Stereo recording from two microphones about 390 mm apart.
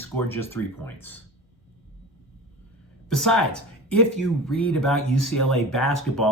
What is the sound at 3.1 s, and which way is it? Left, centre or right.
Speech, centre.